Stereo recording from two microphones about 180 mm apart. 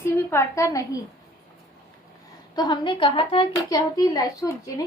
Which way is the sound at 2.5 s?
25° left (ahead or behind).